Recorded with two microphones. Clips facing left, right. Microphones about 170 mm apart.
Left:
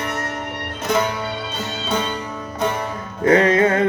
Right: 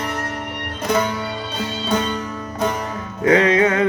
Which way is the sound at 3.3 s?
45° left (ahead or behind).